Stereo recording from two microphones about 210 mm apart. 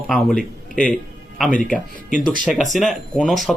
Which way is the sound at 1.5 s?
40° left (ahead or behind).